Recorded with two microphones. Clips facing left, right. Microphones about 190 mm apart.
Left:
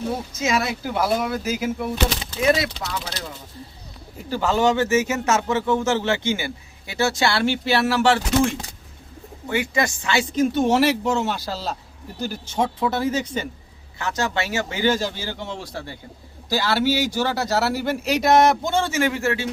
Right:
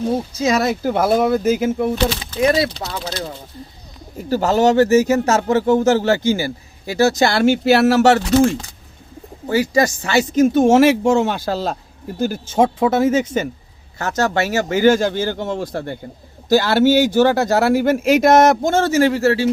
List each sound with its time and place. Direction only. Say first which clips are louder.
0.3 s speech: right 5 dB; 40° right (ahead or behind)
2.4 s speech: right 4 dB; 35° right (ahead or behind)
4.3 s speech: right 5 dB; 40° right (ahead or behind)